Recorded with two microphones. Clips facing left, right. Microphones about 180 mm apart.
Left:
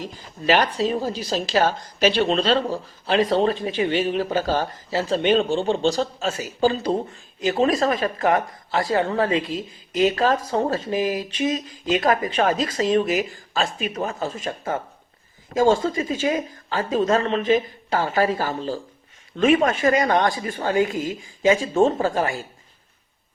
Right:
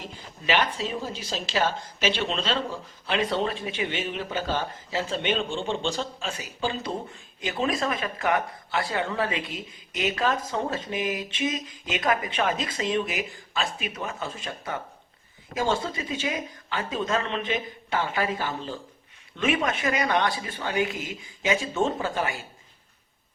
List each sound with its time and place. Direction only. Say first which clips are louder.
0.0 s speech: left 8 dB; 40° left (ahead or behind)